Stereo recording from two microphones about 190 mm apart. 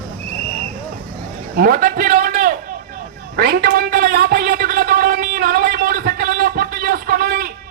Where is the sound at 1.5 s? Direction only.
45° right (ahead or behind).